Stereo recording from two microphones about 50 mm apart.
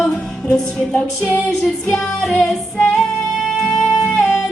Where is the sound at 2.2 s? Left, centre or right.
Centre.